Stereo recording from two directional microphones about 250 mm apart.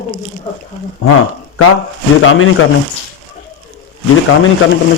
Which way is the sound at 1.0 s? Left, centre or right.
Left.